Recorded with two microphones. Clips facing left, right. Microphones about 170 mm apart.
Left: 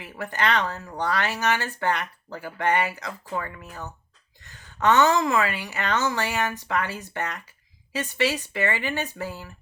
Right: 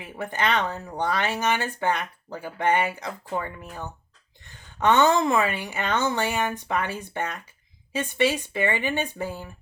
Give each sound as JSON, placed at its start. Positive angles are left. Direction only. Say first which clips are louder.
{"t": 0.0, "sound": "speech", "louder": "even", "side_deg": -20}